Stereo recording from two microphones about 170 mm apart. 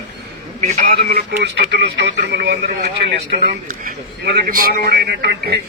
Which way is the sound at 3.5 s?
50° right (ahead or behind).